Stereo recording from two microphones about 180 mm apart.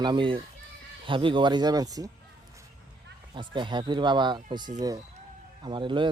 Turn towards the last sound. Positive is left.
turn(degrees=-25)  # may be behind; listen again after turning